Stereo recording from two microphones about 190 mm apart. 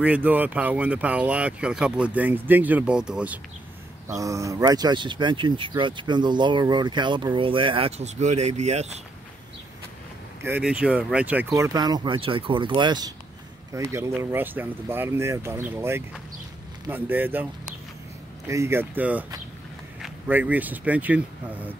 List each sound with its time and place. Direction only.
0.0 s speech: 10° right (ahead or behind)
4.1 s speech: 15° right (ahead or behind); by 8.9 s 35° right (ahead or behind)
10.4 s speech: 10° right (ahead or behind)
18.5 s speech: 15° right (ahead or behind)